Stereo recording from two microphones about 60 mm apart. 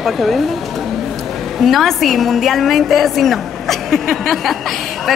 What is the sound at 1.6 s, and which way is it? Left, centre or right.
A woman's voice, centre.